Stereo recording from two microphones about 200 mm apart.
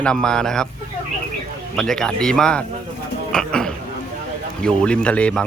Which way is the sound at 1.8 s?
Centre (ahead or behind).